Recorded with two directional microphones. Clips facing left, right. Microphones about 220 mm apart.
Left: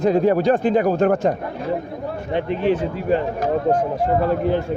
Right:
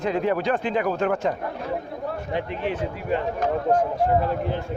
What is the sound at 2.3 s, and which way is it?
Speech, 30° left (ahead or behind).